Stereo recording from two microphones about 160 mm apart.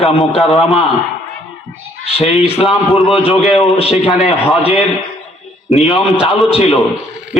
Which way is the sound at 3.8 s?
40° left (ahead or behind).